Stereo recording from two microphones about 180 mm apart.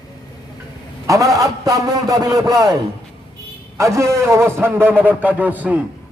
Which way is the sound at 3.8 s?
15° right (ahead or behind).